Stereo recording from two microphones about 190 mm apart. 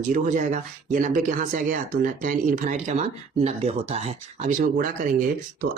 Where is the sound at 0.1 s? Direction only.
40° right (ahead or behind).